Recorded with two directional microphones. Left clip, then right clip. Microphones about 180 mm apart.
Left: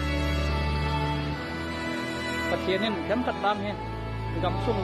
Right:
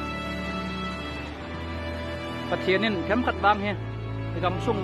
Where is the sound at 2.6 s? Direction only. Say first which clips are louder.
Right 3 dB; 15° right (ahead or behind).